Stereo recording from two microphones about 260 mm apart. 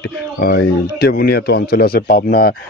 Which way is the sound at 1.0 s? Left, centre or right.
Left.